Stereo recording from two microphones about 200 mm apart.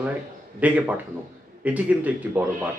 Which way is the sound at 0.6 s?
5° right (ahead or behind).